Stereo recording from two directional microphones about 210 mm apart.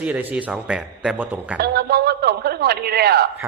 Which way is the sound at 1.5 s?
50° right (ahead or behind).